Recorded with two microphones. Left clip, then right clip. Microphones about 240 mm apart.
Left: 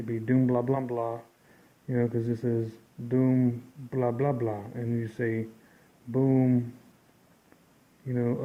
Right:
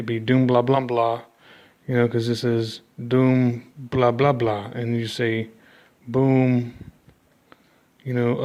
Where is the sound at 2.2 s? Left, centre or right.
Right.